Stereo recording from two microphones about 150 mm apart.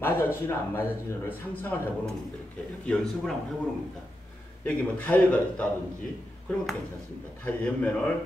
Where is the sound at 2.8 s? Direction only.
5° left (ahead or behind).